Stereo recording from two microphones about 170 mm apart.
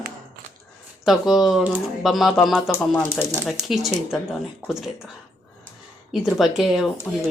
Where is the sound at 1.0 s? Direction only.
Centre (ahead or behind).